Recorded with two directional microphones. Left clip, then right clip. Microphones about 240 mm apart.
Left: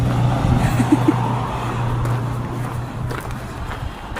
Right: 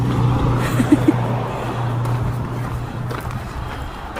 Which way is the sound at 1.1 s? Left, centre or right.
Left.